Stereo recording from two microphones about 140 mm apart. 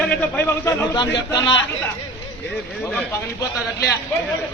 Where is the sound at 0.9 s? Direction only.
30° left (ahead or behind).